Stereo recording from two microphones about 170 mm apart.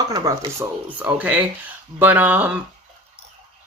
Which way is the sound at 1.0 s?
10° right (ahead or behind).